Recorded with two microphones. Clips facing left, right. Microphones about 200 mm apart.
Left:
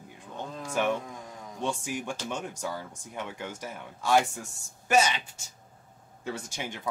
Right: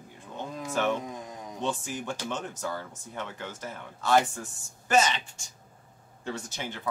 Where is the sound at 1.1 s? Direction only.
20° right (ahead or behind).